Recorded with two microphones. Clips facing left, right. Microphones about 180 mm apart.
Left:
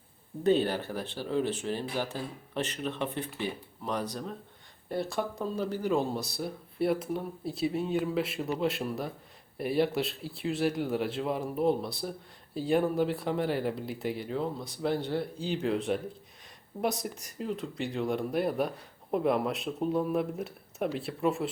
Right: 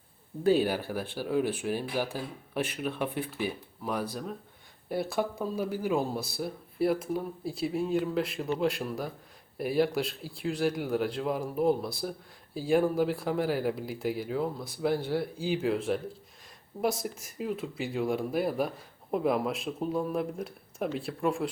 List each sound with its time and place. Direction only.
0.4 s speech: 5° right (ahead or behind)